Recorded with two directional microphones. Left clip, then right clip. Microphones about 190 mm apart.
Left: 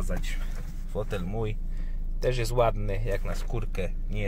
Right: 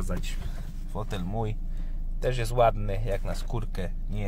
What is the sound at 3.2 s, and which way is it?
Speech, 20° right (ahead or behind).